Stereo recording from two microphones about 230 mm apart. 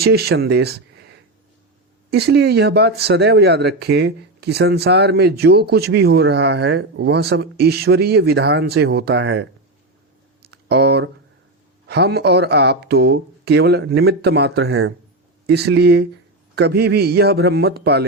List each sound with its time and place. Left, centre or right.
0.0 s speech: right
2.0 s speech: right
10.5 s speech: right
14.7 s speech: right
15.4 s speech: right